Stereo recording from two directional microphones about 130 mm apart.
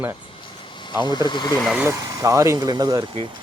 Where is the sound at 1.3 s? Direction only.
35° left (ahead or behind).